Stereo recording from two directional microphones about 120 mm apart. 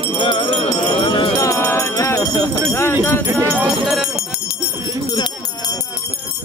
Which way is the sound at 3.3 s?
20° right (ahead or behind).